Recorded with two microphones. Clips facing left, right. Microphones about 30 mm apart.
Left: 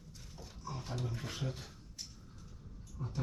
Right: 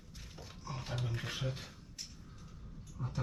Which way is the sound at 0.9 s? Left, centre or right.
Right.